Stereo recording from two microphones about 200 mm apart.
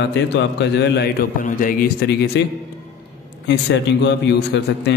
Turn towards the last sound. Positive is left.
turn(degrees=60)  # may be behind; listen again after turning